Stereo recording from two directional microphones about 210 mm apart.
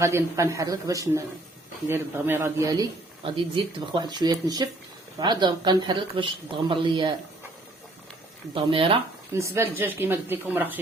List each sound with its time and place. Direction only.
0.0 s speech: 15° right (ahead or behind)
8.5 s speech: 25° right (ahead or behind)
9.3 s speech: 10° right (ahead or behind)